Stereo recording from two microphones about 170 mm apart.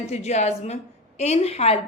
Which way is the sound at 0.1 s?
40° left (ahead or behind).